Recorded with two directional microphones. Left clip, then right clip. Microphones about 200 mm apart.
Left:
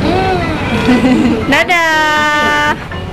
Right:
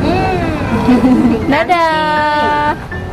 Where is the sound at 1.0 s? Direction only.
15° right (ahead or behind).